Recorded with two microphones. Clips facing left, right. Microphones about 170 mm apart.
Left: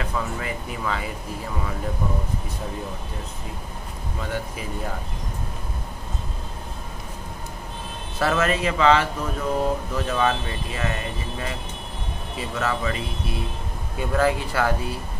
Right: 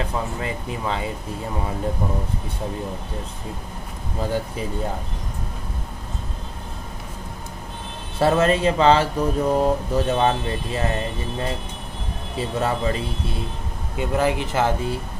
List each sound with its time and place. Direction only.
0.0 s speech: 30° right (ahead or behind)
4.2 s speech: 30° right (ahead or behind)
8.2 s speech: 30° right (ahead or behind)
13.9 s speech: 20° right (ahead or behind)